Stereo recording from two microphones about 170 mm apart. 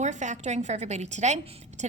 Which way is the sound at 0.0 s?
45° right (ahead or behind).